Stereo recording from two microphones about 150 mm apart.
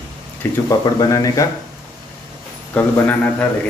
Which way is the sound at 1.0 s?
25° left (ahead or behind).